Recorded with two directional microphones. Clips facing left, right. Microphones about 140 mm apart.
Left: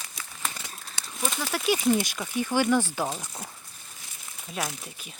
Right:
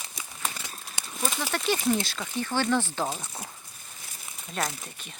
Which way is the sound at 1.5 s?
10° left (ahead or behind).